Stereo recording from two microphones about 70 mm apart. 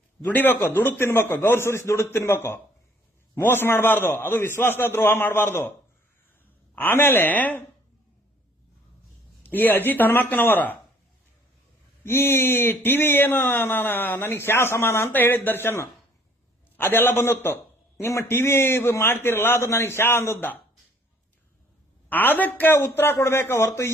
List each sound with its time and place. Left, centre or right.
0.3 s speech: left
6.7 s speech: left
9.4 s speech: left
12.0 s speech: left
22.1 s speech: left
23.6 s speech: left